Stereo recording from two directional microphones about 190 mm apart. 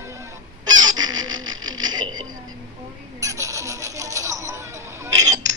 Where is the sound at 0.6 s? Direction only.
20° right (ahead or behind).